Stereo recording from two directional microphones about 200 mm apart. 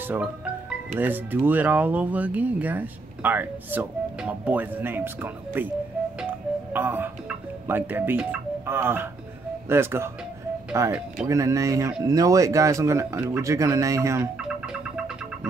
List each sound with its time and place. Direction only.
0.9 s speech: 10° right (ahead or behind)
6.2 s music: 10° right (ahead or behind)
9.7 s speech: 10° right (ahead or behind)